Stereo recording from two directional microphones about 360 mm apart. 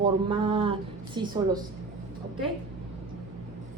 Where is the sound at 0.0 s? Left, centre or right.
Centre.